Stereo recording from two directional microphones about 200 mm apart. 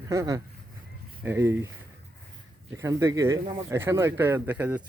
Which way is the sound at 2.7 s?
15° right (ahead or behind).